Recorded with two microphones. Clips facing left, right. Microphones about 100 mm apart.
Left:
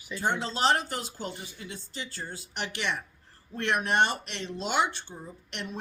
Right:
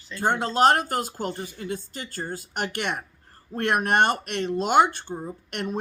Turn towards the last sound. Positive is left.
turn(degrees=-50)  # may be behind; listen again after turning